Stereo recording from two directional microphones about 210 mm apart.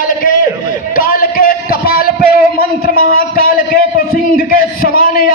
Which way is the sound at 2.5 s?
45° left (ahead or behind).